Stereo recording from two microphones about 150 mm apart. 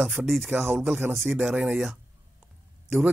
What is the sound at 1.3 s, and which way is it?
Speech, 5° right (ahead or behind).